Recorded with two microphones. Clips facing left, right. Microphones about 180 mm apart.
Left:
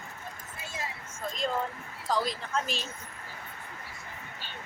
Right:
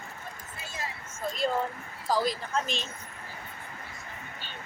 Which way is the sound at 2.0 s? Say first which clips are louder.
Right 2 dB; 5° right (ahead or behind).